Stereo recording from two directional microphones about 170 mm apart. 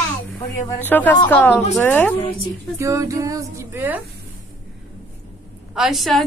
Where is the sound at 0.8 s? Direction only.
10° left (ahead or behind).